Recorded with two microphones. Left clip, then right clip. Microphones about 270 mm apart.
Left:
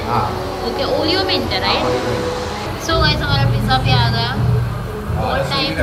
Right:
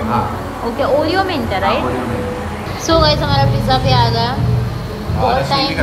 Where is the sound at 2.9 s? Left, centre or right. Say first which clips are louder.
Right 5 dB; centre.